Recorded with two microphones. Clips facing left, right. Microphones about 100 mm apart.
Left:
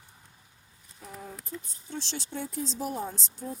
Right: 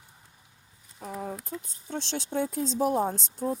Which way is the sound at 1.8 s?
55° right (ahead or behind).